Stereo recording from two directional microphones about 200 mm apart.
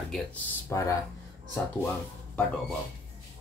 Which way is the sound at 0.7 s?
15° left (ahead or behind).